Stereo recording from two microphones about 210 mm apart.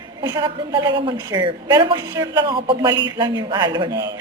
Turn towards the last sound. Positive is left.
turn(degrees=-20)  # may be behind; listen again after turning